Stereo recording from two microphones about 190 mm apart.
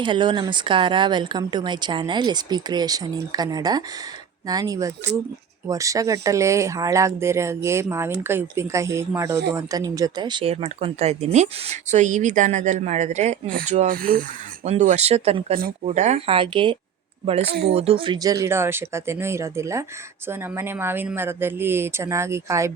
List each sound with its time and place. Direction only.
0.0 s speech: 25° right (ahead or behind); by 14.7 s 50° right (ahead or behind)
14.7 s speech: 35° right (ahead or behind)
17.5 s speech: 55° right (ahead or behind)
17.7 s speech: 30° right (ahead or behind)